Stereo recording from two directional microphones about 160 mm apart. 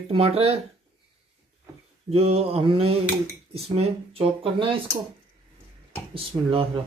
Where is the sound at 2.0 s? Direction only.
40° right (ahead or behind).